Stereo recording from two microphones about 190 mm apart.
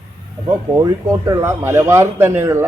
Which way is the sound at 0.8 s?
15° right (ahead or behind).